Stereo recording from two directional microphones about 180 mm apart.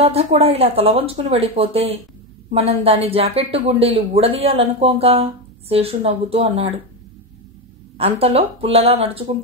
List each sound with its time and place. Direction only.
0.0 s speech: 35° right (ahead or behind)
8.0 s speech: 35° right (ahead or behind)